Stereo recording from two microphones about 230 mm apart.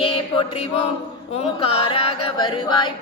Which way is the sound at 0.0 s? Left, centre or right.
Left.